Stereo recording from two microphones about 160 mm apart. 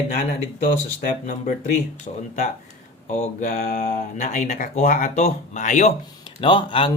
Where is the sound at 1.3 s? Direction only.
50° left (ahead or behind).